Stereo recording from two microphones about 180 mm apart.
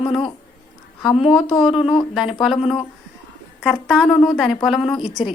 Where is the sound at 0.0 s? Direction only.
30° left (ahead or behind).